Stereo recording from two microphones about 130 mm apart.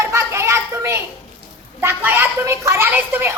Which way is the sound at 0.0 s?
20° right (ahead or behind).